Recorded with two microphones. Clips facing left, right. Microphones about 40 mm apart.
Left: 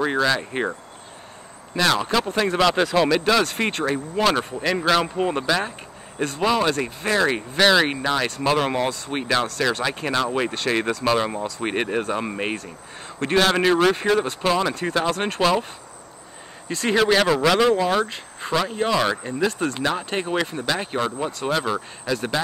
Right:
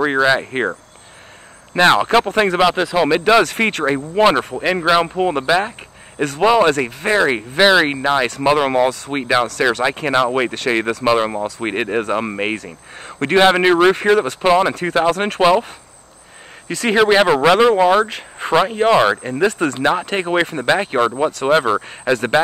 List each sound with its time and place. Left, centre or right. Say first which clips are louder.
0.0 s speech: right 6 dB; right
1.8 s speech: right 8 dB; right
2.6 s speech: right 3 dB; centre
3.3 s speech: right 6 dB; right
6.4 s speech: right 8 dB; right
11.1 s speech: right 7 dB; right
12.1 s speech: right 5 dB; right
12.5 s speech: right 4 dB; right
16.6 s speech: right 5 dB; right
21.6 s speech: right 8 dB; right
22.1 s speech: right 8 dB; right